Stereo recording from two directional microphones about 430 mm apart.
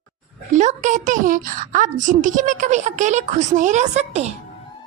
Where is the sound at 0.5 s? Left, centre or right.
Centre.